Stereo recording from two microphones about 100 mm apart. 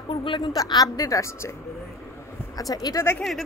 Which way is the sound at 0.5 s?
40° left (ahead or behind).